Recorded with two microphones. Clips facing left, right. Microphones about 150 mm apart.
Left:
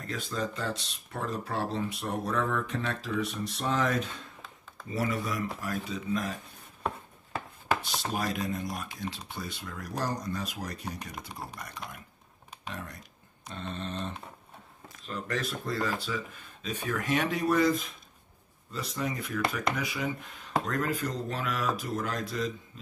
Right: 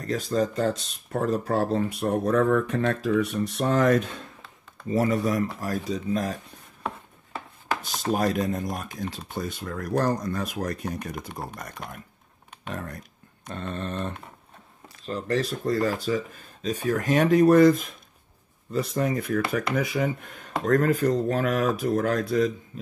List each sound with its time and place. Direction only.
0.0 s speech: 40° right (ahead or behind)
4.8 s speech: 40° right (ahead or behind)
7.8 s speech: 45° right (ahead or behind)
15.0 s speech: 35° right (ahead or behind); by 22.5 s 55° right (ahead or behind)